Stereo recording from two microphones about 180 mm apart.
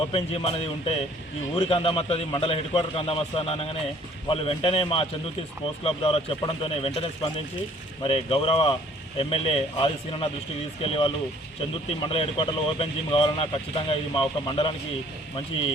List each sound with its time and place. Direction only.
0.1 s speech: 30° left (ahead or behind)